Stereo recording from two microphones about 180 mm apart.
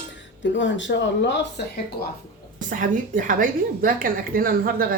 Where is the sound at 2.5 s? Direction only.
45° right (ahead or behind).